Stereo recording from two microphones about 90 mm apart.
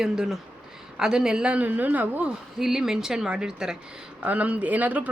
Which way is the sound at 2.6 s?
5° right (ahead or behind).